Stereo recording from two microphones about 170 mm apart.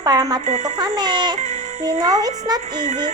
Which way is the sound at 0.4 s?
40° right (ahead or behind).